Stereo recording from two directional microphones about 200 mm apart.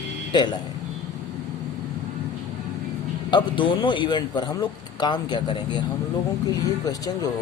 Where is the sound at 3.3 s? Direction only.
25° left (ahead or behind).